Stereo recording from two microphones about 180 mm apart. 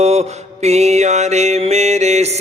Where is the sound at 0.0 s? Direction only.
35° right (ahead or behind).